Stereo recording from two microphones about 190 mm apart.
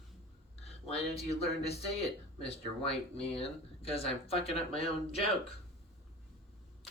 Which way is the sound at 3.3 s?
30° left (ahead or behind).